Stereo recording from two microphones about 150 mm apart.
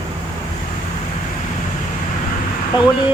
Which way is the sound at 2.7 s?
30° left (ahead or behind).